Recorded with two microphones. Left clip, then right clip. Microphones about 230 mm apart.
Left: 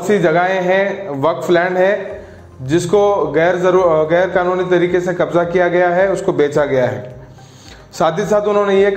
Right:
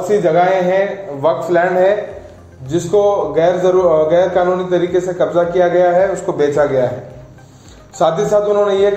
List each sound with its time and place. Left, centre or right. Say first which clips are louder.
0.1 s a man's voice: right 1 dB; left
8.0 s a man's voice: right 1 dB; left